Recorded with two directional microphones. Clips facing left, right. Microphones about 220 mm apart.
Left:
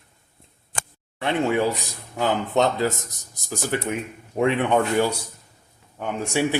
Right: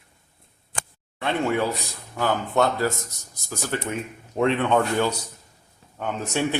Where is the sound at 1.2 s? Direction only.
15° left (ahead or behind).